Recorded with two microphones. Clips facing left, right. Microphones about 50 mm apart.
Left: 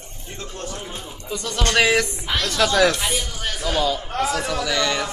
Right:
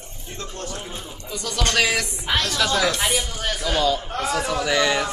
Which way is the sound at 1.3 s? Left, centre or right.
Left.